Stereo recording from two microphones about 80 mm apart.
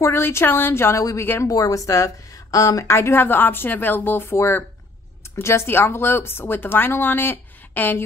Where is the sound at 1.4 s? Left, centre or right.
Left.